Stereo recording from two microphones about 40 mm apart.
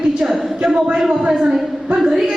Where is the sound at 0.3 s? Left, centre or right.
Centre.